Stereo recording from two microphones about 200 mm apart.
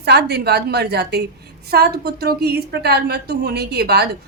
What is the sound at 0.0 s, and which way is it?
A woman's voice, 55° right (ahead or behind).